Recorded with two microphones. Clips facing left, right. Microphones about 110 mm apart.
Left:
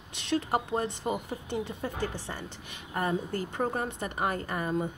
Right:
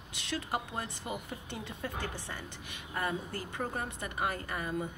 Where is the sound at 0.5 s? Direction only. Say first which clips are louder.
Left 7 dB; 25° left (ahead or behind).